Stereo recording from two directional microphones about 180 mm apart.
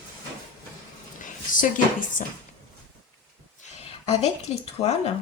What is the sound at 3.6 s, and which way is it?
Speech, 40° left (ahead or behind).